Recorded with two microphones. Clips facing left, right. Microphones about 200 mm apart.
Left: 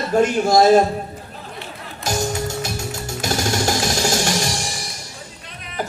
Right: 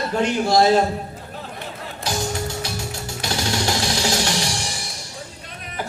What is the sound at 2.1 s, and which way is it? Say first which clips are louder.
Music: left 3 dB; 45° left (ahead or behind).